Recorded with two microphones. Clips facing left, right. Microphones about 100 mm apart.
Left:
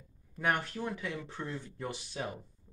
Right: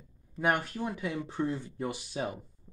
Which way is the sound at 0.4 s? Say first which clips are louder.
Right 3 dB; 10° right (ahead or behind).